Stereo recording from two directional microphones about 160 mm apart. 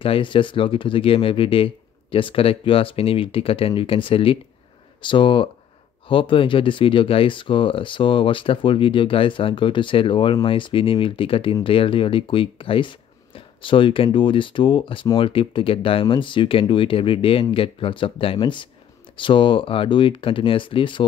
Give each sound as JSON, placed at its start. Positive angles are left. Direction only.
{"t": 0.0, "sound": "speech", "side_deg": 35}